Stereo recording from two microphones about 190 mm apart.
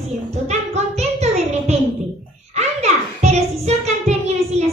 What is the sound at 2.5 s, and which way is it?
Music, 35° right (ahead or behind).